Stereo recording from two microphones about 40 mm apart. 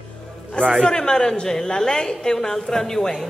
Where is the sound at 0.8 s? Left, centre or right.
Centre.